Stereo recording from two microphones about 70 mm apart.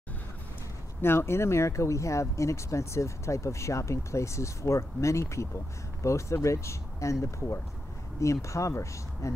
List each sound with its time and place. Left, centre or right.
1.0 s speech: left